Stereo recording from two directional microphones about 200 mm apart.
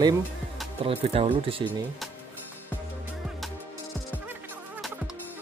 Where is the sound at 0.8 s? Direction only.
30° right (ahead or behind).